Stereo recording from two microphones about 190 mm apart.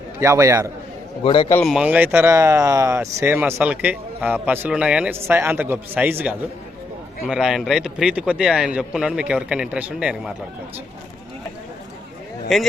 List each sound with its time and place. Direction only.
0.2 s speech: 15° right (ahead or behind)
1.2 s a man's voice: 25° left (ahead or behind)
1.6 s speech: 5° right (ahead or behind)
12.5 s speech: centre (ahead or behind)